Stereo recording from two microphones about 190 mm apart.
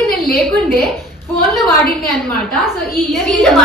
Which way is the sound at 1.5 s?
Centre (ahead or behind).